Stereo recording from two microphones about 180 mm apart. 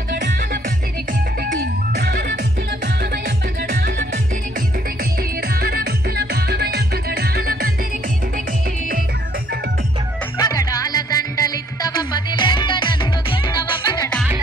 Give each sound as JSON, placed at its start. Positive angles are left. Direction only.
{"t": 0.1, "sound": "music", "side_deg": -55}
{"t": 5.6, "sound": "music", "side_deg": -60}
{"t": 10.3, "sound": "music", "side_deg": 20}